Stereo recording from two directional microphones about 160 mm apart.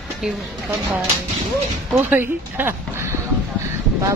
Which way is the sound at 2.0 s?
10° right (ahead or behind).